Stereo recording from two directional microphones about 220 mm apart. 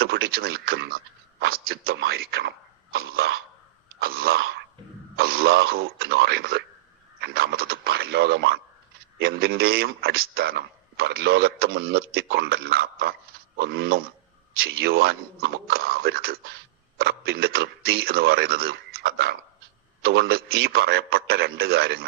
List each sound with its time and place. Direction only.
0.0 s a man's voice: 45° right (ahead or behind)